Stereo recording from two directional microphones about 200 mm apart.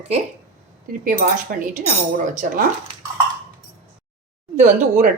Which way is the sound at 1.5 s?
45° right (ahead or behind).